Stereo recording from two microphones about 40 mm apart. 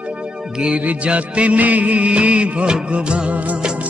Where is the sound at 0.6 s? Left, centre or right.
Right.